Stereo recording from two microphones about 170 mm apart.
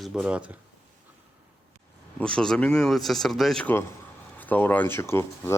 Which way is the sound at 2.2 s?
5° left (ahead or behind).